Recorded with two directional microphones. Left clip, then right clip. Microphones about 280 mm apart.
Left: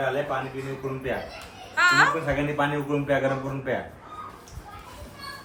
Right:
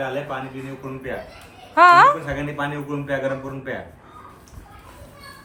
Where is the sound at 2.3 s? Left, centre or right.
Centre.